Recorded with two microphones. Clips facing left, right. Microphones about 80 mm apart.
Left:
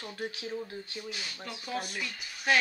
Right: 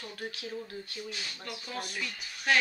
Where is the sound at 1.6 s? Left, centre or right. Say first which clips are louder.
Left 3 dB; centre.